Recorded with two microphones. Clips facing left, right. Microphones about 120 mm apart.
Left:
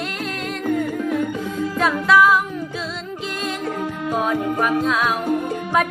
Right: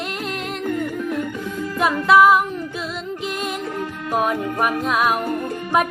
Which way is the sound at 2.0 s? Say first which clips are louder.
Right 3 dB; 25° right (ahead or behind).